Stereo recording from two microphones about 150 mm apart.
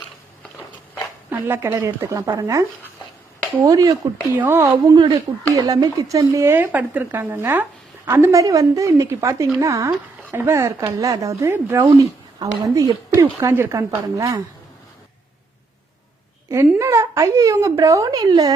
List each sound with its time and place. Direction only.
1.3 s speech: 15° right (ahead or behind)
16.5 s speech: 20° right (ahead or behind)